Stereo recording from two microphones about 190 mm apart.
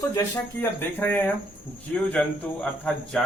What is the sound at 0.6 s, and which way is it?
Speech, 10° left (ahead or behind).